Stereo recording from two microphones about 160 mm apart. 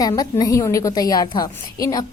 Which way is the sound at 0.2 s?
20° left (ahead or behind).